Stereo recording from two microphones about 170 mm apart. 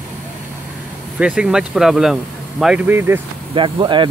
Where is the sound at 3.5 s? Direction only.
30° right (ahead or behind).